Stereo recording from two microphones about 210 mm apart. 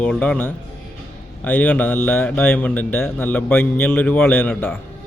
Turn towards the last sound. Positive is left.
turn(degrees=10)  # may be behind; listen again after turning